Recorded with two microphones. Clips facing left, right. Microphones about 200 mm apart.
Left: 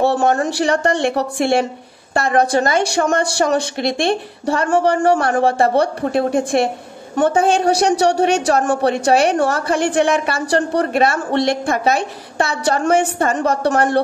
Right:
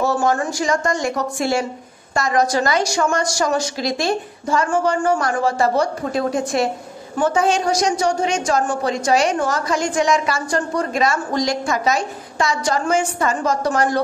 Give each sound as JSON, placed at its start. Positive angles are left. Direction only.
{"t": 0.5, "sound": "a woman's voice", "side_deg": 65}
{"t": 3.9, "sound": "speech", "side_deg": 30}
{"t": 4.6, "sound": "a woman's voice", "side_deg": 65}